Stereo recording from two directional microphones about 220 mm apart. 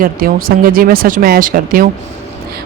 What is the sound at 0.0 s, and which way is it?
Speech, 40° right (ahead or behind).